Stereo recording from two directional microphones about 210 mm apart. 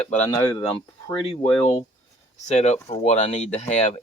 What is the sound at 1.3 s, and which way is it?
Speech, 25° left (ahead or behind).